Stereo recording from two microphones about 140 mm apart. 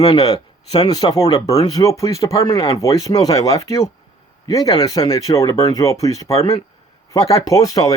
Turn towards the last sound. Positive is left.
turn(degrees=25)  # may be behind; listen again after turning